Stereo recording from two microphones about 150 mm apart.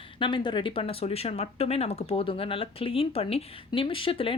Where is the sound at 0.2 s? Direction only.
35° left (ahead or behind).